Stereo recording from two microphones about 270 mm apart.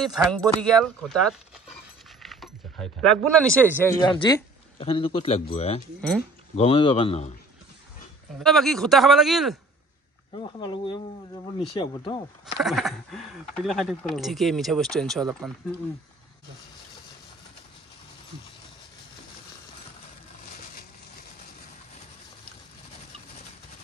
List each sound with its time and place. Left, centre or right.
0.0 s speech: centre
2.2 s keys jangling: centre
3.7 s speech: centre
5.9 s speech: centre
6.5 s speech: left
8.4 s speech: centre
10.3 s speech: centre
12.5 s speech: centre